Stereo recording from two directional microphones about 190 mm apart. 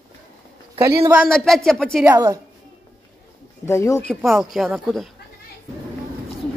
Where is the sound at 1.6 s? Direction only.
5° left (ahead or behind).